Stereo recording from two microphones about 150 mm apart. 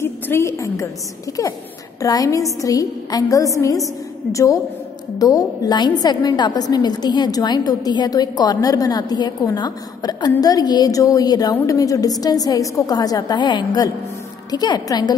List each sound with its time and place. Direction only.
0.0 s a woman's voice: 15° left (ahead or behind)